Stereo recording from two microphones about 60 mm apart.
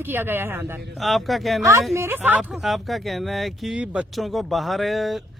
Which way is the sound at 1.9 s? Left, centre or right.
Right.